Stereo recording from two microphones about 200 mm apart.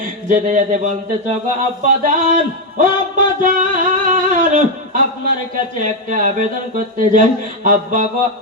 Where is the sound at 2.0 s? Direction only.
40° right (ahead or behind).